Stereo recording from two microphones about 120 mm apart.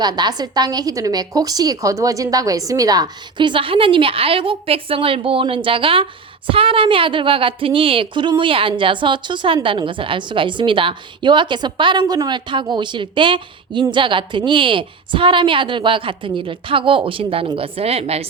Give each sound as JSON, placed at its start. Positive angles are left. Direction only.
{"t": 0.0, "sound": "a woman's voice", "side_deg": -35}